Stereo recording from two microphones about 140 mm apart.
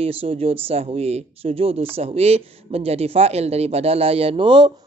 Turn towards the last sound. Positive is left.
turn(degrees=-35)  # may be behind; listen again after turning